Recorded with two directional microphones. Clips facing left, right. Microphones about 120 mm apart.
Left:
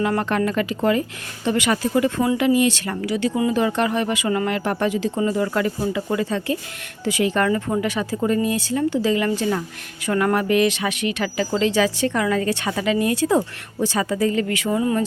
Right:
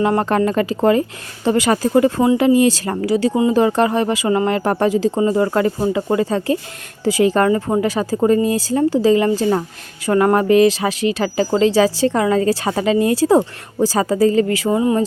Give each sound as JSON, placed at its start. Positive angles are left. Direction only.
{"t": 0.0, "sound": "speech", "side_deg": -30}